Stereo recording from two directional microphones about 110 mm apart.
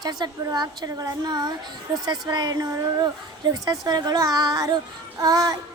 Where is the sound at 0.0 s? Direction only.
40° right (ahead or behind).